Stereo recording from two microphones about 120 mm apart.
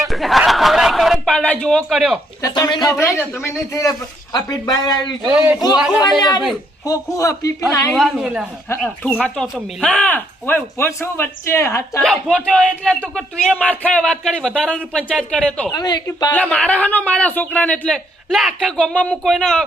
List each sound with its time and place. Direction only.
0.0 s chuckle: centre (ahead or behind)
2.4 s speech: 35° left (ahead or behind)
2.9 s speech: 25° left (ahead or behind)
5.2 s speech: 20° right (ahead or behind)
5.7 s speech: 5° right (ahead or behind)
6.0 s speech: 35° left (ahead or behind)
7.9 s speech: centre (ahead or behind); by 11.8 s 20° left (ahead or behind)
11.9 s speech: 5° left (ahead or behind)
15.7 s speech: 35° left (ahead or behind)
16.3 s speech: 10° left (ahead or behind)